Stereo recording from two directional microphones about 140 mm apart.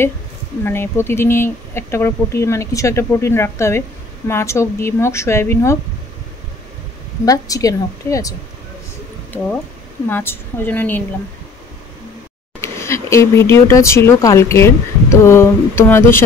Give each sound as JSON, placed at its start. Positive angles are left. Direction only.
{"t": 0.7, "sound": "speech", "side_deg": 15}
{"t": 7.2, "sound": "speech", "side_deg": 25}
{"t": 10.0, "sound": "a woman's voice", "side_deg": 15}
{"t": 12.5, "sound": "speech", "side_deg": 20}